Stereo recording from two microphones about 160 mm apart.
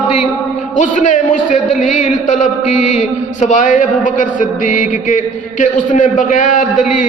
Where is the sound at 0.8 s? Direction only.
55° left (ahead or behind).